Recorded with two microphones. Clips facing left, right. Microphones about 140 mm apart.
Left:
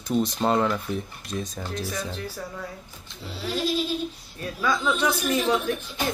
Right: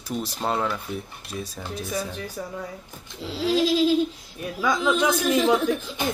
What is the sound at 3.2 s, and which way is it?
Goat, 90° right.